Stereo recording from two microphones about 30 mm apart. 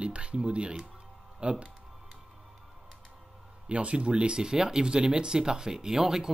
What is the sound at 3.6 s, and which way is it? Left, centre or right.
Speech, right.